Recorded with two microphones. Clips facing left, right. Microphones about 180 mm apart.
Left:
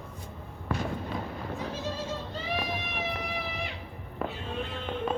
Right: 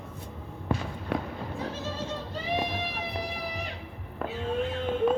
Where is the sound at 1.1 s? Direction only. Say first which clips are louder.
Right 5 dB; 65° right (ahead or behind).